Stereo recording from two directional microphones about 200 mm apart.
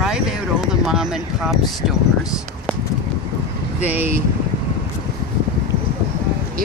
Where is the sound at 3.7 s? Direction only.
10° right (ahead or behind).